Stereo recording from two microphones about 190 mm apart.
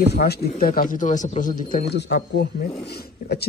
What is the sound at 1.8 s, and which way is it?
Speech, 60° left (ahead or behind).